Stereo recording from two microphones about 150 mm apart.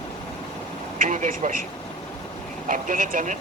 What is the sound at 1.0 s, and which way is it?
Speech, 60° right (ahead or behind).